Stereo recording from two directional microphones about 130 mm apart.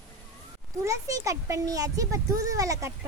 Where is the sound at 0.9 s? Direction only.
25° right (ahead or behind).